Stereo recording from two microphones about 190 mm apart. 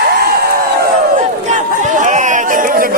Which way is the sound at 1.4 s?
40° right (ahead or behind).